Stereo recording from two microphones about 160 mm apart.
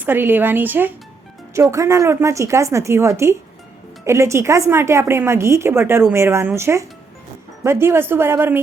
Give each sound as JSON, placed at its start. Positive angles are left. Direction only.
{"t": 0.0, "sound": "a woman's voice", "side_deg": -10}